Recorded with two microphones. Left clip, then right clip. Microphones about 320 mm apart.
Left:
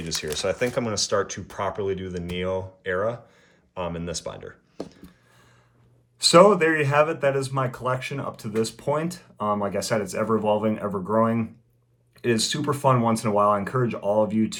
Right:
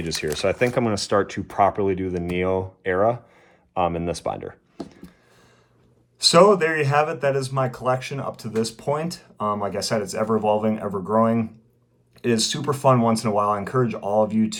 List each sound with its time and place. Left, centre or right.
0.0 s speech: right
6.1 s speech: centre